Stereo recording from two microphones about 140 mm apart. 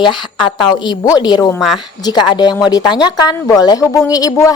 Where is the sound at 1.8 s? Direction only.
30° left (ahead or behind).